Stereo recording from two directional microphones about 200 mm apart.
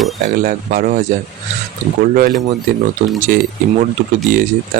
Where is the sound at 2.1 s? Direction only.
45° right (ahead or behind).